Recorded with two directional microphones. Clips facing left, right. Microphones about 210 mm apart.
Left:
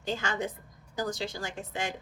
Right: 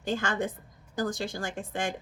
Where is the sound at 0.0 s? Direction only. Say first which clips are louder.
Right 3 dB; 50° right (ahead or behind).